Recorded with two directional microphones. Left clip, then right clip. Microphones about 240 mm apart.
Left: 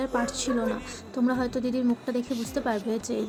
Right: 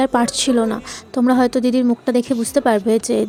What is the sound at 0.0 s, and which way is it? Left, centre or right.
A woman's voice, right.